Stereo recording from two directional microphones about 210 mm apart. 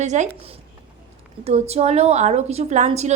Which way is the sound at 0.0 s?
35° right (ahead or behind).